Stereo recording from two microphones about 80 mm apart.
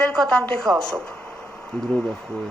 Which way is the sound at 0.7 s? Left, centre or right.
Right.